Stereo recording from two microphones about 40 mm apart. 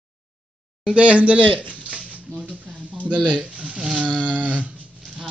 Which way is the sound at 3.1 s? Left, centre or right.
Right.